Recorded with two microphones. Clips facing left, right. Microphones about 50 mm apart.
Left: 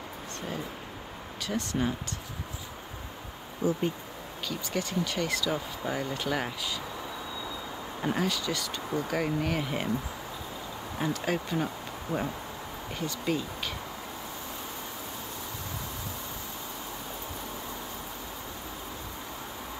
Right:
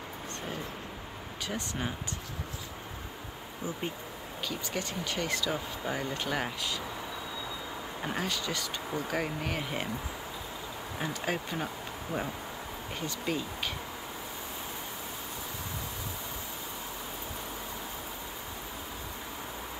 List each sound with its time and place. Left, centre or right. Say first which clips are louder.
1.5 s speech: left 6 dB; centre
3.6 s speech: left 9 dB; centre
4.5 s speech: left 3 dB; centre
8.0 s speech: left 5 dB; centre
11.0 s speech: left 4 dB; centre